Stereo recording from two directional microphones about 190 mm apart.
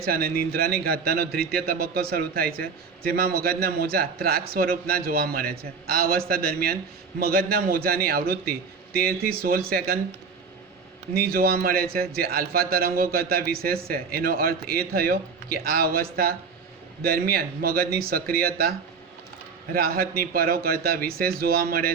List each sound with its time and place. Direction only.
0.0 s a man's voice: 50° right (ahead or behind)
11.1 s a man's voice: 55° right (ahead or behind)
19.7 s a man's voice: 50° right (ahead or behind)